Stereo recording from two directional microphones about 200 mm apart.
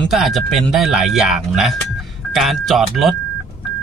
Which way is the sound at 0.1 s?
Centre (ahead or behind).